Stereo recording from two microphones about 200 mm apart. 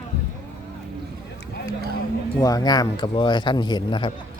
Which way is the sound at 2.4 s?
20° left (ahead or behind).